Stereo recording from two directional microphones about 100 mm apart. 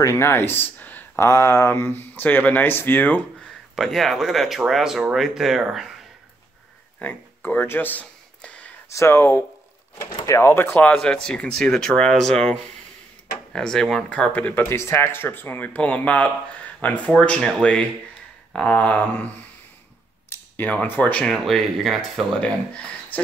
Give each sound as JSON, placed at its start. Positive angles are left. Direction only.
{"t": 0.0, "sound": "speech", "side_deg": 25}
{"t": 3.7, "sound": "speech", "side_deg": 0}
{"t": 7.0, "sound": "a sound", "side_deg": 15}
{"t": 8.9, "sound": "speech", "side_deg": 25}
{"t": 21.5, "sound": "speech", "side_deg": 0}
{"t": 22.4, "sound": "speech", "side_deg": 15}